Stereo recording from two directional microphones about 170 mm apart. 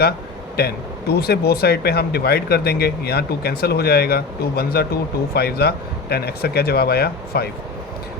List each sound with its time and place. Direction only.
0.5 s speech: 70° left (ahead or behind)